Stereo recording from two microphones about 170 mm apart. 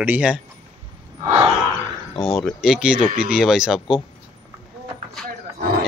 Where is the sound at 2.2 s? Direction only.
Centre (ahead or behind).